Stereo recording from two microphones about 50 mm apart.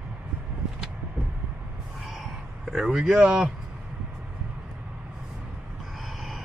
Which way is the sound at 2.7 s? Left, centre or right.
Centre.